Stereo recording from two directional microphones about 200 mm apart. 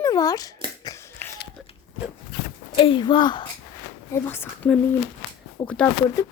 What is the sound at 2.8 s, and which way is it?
Speech, 25° left (ahead or behind).